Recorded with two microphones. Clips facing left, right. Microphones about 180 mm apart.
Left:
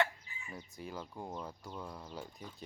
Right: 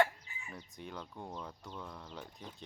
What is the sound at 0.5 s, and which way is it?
Speech, 5° left (ahead or behind).